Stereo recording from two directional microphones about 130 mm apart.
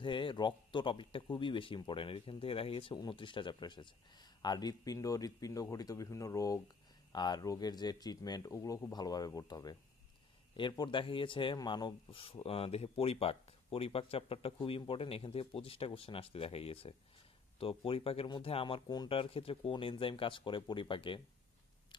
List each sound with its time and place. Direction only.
0.0 s a man's voice: 40° left (ahead or behind)